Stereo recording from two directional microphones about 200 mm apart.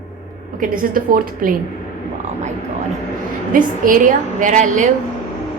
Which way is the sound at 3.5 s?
45° right (ahead or behind).